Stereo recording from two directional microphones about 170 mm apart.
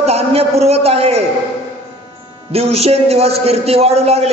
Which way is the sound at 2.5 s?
35° right (ahead or behind).